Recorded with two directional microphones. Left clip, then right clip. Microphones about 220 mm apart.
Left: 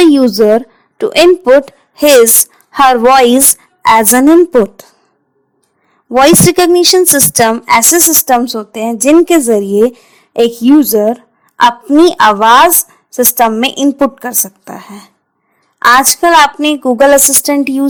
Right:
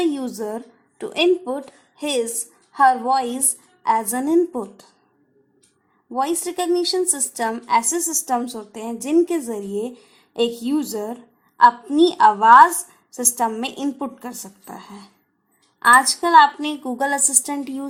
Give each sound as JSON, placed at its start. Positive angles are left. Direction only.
{"t": 0.0, "sound": "a woman's voice", "side_deg": 35}
{"t": 6.1, "sound": "a woman's voice", "side_deg": 40}